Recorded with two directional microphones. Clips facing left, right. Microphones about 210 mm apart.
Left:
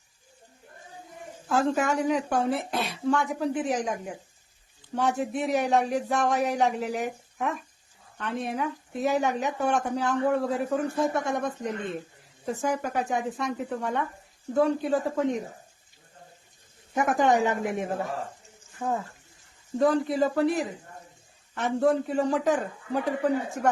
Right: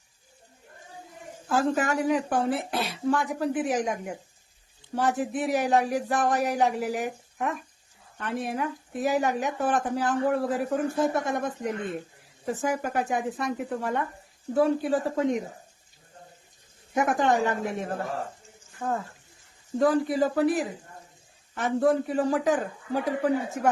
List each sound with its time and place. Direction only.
1.5 s speech: centre (ahead or behind)
17.1 s speech: centre (ahead or behind)
17.3 s a woman's voice: 20° left (ahead or behind)
18.8 s speech: 10° left (ahead or behind)